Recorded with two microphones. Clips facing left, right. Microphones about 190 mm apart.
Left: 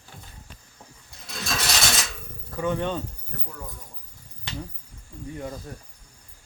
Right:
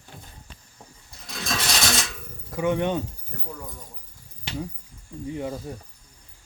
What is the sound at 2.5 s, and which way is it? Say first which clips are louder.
Speech: right 3 dB; 15° right (ahead or behind).